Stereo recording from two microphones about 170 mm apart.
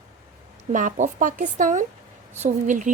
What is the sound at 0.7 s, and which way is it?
A woman's voice, 50° right (ahead or behind).